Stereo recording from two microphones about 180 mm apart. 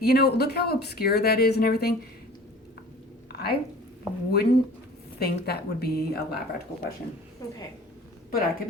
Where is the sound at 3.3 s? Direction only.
60° left (ahead or behind).